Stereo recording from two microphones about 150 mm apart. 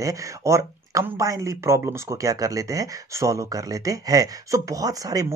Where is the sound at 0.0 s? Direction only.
20° right (ahead or behind).